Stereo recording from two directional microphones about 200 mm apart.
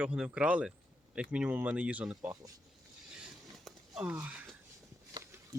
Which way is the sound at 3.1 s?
Centre (ahead or behind).